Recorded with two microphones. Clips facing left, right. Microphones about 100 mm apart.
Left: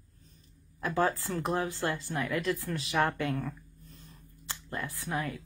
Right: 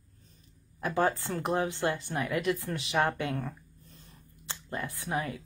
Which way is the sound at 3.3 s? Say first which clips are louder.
Even; 30° right (ahead or behind).